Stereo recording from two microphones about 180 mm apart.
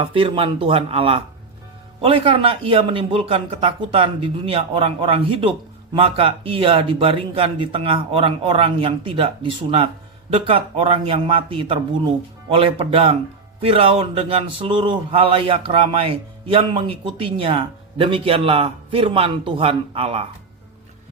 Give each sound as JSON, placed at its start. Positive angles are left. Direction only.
{"t": 0.0, "sound": "a man's voice", "side_deg": -30}